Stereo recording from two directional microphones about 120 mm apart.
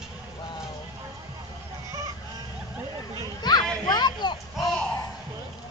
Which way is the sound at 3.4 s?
35° left (ahead or behind).